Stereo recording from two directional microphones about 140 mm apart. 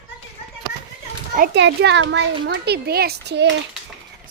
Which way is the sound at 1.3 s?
65° right (ahead or behind).